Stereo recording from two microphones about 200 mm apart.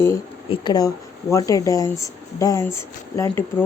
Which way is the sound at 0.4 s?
25° left (ahead or behind).